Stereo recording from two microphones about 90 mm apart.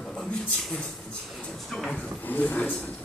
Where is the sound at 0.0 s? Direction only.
10° left (ahead or behind).